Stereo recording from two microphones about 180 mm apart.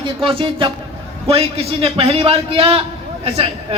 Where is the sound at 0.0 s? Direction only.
30° right (ahead or behind).